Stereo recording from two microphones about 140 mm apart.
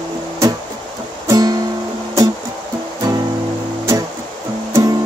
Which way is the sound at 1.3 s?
30° right (ahead or behind).